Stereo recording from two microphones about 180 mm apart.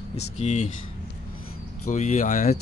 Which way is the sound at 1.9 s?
45° left (ahead or behind).